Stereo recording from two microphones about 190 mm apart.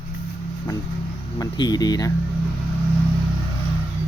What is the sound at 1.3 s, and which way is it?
Speech, 20° left (ahead or behind).